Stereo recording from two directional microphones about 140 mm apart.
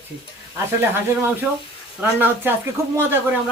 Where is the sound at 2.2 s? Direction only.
15° right (ahead or behind).